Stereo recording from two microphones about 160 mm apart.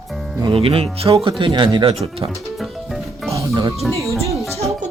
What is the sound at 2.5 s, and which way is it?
Music, centre (ahead or behind).